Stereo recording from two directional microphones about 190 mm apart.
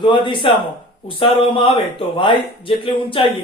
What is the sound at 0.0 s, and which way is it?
Speech, 25° left (ahead or behind).